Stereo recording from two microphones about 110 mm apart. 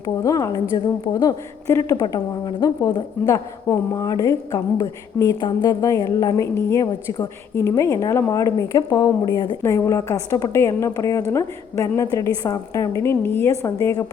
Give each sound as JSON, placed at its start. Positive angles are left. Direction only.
{"t": 0.0, "sound": "a woman's voice", "side_deg": 30}
{"t": 1.6, "sound": "a woman's voice", "side_deg": 25}
{"t": 2.0, "sound": "a woman's voice", "side_deg": 40}
{"t": 5.8, "sound": "a woman's voice", "side_deg": 30}
{"t": 9.6, "sound": "a woman's voice", "side_deg": 25}